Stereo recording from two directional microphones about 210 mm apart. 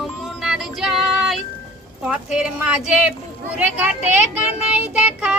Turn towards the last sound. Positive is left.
turn(degrees=-5)  # may be behind; listen again after turning